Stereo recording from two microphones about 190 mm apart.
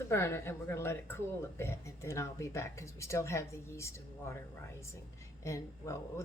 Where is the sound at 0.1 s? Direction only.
15° left (ahead or behind).